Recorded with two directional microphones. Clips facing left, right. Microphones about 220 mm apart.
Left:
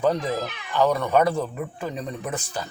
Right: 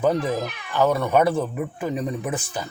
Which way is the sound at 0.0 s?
15° right (ahead or behind).